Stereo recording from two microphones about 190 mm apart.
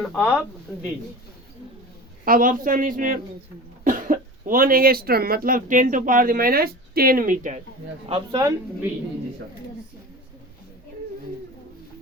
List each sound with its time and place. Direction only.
0.0 s speech: 5° left (ahead or behind)
2.2 s speech: 45° right (ahead or behind)
8.0 s speech: 25° right (ahead or behind)